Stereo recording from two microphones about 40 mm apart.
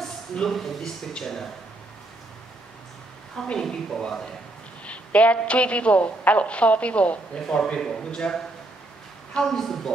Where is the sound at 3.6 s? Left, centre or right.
Centre.